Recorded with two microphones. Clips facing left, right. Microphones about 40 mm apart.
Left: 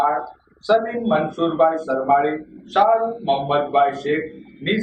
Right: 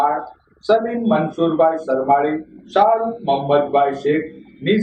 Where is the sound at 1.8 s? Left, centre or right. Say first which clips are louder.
Right 3 dB; centre.